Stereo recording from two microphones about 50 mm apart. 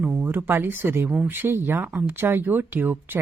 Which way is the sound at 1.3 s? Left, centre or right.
Right.